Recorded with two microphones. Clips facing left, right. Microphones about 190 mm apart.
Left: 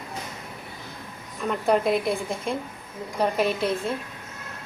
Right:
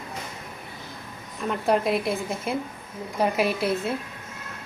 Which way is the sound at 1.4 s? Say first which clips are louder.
Left 1 dB; centre (ahead or behind).